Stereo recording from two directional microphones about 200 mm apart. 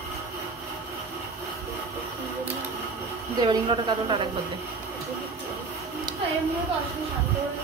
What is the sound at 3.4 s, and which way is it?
Speech, 20° right (ahead or behind).